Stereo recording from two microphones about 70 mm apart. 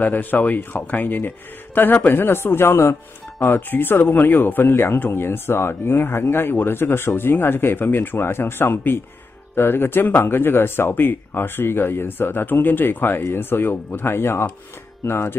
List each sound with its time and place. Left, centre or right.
0.0 s speech: left